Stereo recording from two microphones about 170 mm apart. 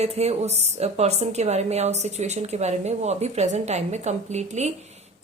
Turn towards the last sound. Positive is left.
turn(degrees=-40)  # may be behind; listen again after turning